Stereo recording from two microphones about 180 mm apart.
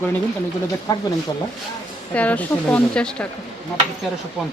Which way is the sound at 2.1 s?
10° left (ahead or behind).